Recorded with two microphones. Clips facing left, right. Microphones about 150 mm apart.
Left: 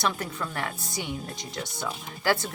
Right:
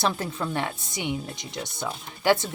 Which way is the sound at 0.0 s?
25° right (ahead or behind).